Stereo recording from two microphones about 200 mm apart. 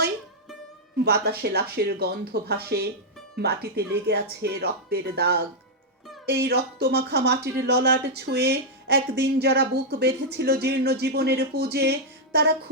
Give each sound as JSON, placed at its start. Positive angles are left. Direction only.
{"t": 1.0, "sound": "speech", "side_deg": -55}